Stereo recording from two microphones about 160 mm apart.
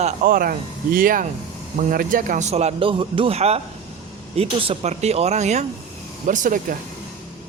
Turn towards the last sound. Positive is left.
turn(degrees=-55)  # may be behind; listen again after turning